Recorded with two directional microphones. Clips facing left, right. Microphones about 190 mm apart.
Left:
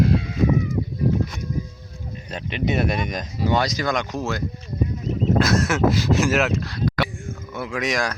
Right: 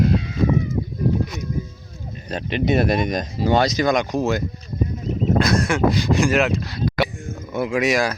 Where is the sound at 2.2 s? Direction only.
35° right (ahead or behind); by 4.4 s 15° right (ahead or behind).